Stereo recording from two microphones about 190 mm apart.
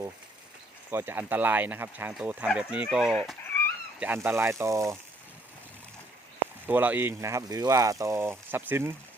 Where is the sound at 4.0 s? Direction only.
10° right (ahead or behind).